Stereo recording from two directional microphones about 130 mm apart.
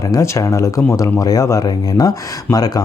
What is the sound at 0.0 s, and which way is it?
Speech, 25° left (ahead or behind).